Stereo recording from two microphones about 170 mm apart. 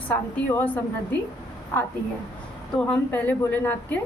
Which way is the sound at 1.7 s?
10° left (ahead or behind).